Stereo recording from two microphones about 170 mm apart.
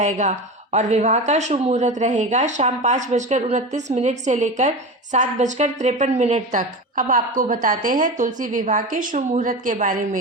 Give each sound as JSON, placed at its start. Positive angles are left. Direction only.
{"t": 0.0, "sound": "a woman's voice", "side_deg": -45}